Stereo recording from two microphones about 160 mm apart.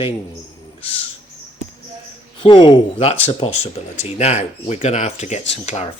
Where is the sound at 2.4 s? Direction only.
30° left (ahead or behind).